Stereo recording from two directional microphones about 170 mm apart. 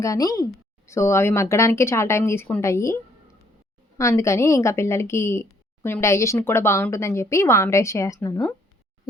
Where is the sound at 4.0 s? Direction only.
15° left (ahead or behind).